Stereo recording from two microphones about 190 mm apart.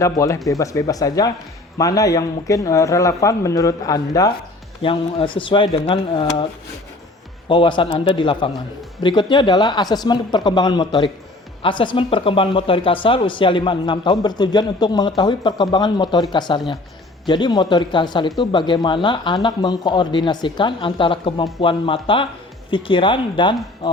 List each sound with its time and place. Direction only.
0.0 s speech: 15° left (ahead or behind)
7.4 s speech: 25° left (ahead or behind)